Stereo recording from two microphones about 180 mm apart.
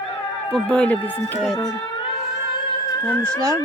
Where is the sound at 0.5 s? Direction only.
5° left (ahead or behind).